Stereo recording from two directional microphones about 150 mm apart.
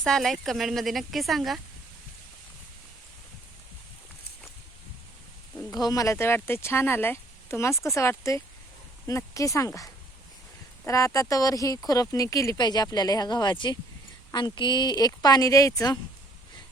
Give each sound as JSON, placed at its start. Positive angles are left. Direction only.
{"t": 0.0, "sound": "speech", "side_deg": 0}
{"t": 5.7, "sound": "speech", "side_deg": 25}